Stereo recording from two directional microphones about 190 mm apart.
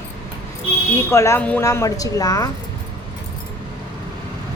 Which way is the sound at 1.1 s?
15° left (ahead or behind).